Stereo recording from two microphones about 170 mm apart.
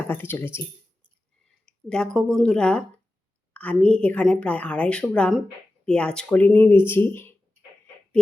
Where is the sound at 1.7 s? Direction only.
5° left (ahead or behind).